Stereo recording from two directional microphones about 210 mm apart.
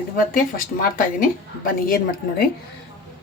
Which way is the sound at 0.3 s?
40° left (ahead or behind).